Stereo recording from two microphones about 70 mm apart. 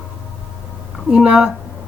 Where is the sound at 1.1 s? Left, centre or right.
Centre.